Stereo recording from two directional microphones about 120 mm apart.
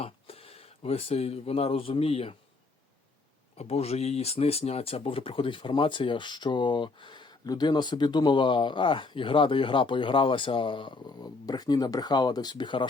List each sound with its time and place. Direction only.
0.0 s speech: 55° left (ahead or behind)
3.6 s speech: 60° left (ahead or behind); by 12.9 s 40° left (ahead or behind)